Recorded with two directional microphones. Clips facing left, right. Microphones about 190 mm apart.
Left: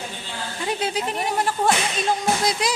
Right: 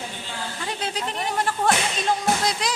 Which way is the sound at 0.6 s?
10° left (ahead or behind).